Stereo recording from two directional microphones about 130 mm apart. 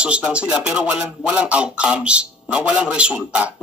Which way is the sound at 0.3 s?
10° right (ahead or behind).